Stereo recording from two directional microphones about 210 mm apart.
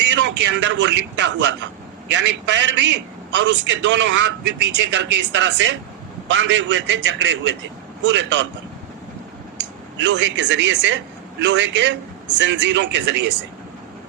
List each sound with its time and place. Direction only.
0.1 s speech: 60° right (ahead or behind)
9.6 s speech: 60° right (ahead or behind)